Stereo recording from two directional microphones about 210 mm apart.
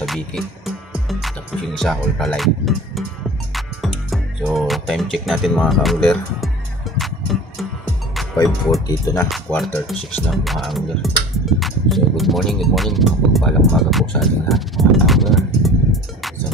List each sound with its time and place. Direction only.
0.0 s music: centre (ahead or behind)
1.8 s speech: centre (ahead or behind)
8.8 s speech: 15° left (ahead or behind)
9.3 s speech: centre (ahead or behind)